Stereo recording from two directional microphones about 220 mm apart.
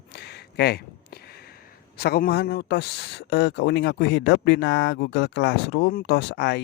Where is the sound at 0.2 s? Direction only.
45° left (ahead or behind).